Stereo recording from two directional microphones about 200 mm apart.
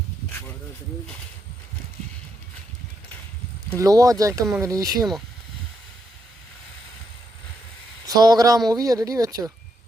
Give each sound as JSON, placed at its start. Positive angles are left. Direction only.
{"t": 3.8, "sound": "speech", "side_deg": -15}
{"t": 8.0, "sound": "speech", "side_deg": -20}